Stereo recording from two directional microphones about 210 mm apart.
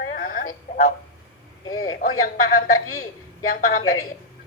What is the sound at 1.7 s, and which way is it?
Speech, 80° left.